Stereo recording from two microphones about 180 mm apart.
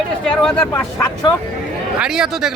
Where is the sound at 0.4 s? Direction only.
10° left (ahead or behind).